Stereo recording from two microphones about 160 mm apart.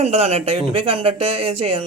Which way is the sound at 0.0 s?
40° right (ahead or behind).